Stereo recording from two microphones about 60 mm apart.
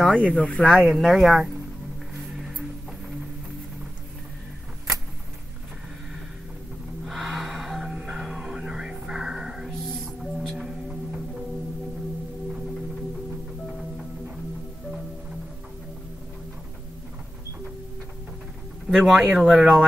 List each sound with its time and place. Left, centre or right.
0.1 s speech: centre
0.8 s speech: centre
2.1 s music: centre
7.1 s music: centre
18.9 s a man's voice: centre